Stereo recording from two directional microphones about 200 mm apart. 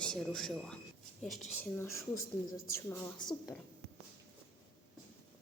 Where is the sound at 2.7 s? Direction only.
20° left (ahead or behind).